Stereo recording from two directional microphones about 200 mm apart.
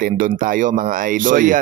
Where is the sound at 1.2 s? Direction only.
40° right (ahead or behind).